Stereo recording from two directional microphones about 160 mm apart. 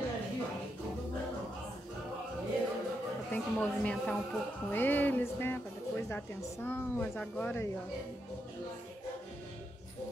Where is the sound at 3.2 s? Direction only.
10° left (ahead or behind).